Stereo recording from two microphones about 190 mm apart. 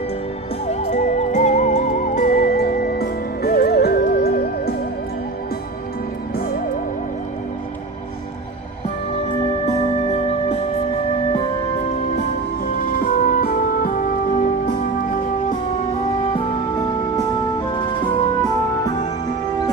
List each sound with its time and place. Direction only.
0.7 s music: 40° left (ahead or behind); by 4.7 s 55° left (ahead or behind)
9.6 s music: 35° left (ahead or behind)
12.8 s music: 50° left (ahead or behind)
16.3 s music: 25° left (ahead or behind)